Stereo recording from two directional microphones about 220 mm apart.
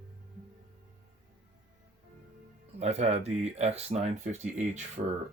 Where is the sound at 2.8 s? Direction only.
30° right (ahead or behind).